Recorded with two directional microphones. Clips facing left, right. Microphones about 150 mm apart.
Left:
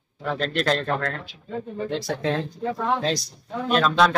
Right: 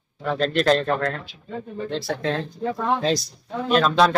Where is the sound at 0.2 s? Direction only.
Centre (ahead or behind).